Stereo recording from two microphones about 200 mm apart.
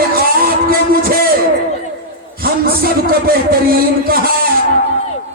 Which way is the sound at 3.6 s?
50° right (ahead or behind).